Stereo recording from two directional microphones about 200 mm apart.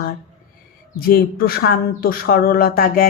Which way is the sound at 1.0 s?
45° left (ahead or behind).